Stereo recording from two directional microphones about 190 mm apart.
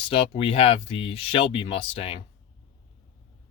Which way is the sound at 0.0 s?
30° left (ahead or behind).